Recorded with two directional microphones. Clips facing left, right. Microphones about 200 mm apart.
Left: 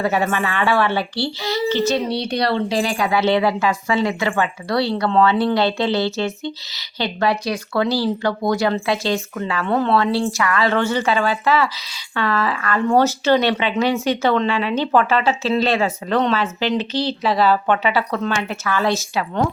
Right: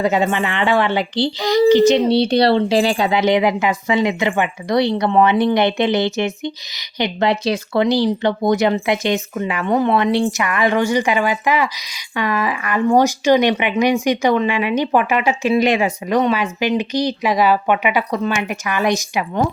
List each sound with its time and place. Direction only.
0.0 s a woman's voice: 20° right (ahead or behind)
2.0 s a woman's voice: 30° right (ahead or behind)